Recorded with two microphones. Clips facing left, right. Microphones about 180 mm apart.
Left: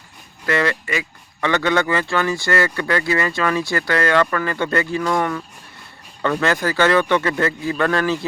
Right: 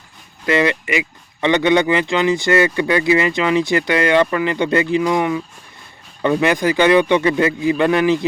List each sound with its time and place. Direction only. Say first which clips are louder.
0.4 s speech: right 4 dB; 20° right (ahead or behind)